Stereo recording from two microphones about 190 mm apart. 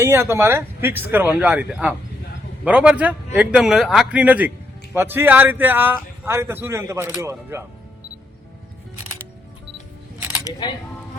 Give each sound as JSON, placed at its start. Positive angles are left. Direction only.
{"t": 0.0, "sound": "speech", "side_deg": -15}
{"t": 10.4, "sound": "speech", "side_deg": 20}